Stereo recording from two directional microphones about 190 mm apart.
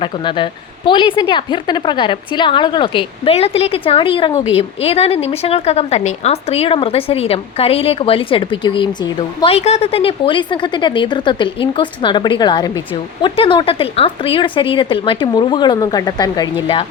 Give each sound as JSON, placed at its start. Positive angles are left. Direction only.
{"t": 0.0, "sound": "a woman's voice", "side_deg": 25}